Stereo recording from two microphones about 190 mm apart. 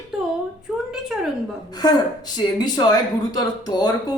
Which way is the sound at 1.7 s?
20° left (ahead or behind).